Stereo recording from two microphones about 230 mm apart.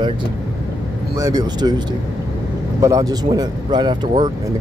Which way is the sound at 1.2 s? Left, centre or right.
Centre.